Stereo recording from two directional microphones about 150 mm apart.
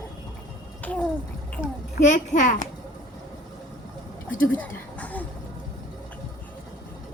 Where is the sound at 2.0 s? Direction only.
55° left (ahead or behind).